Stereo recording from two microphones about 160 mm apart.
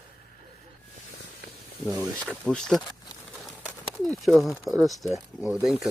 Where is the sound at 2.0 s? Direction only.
5° left (ahead or behind).